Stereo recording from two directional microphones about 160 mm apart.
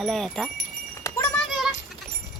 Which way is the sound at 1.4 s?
Centre (ahead or behind).